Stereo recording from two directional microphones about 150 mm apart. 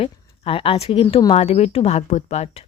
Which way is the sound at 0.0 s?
40° left (ahead or behind).